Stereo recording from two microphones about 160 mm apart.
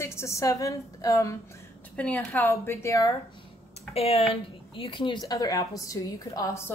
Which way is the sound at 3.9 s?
40° left (ahead or behind).